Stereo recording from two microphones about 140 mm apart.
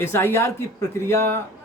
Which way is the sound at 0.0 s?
15° left (ahead or behind).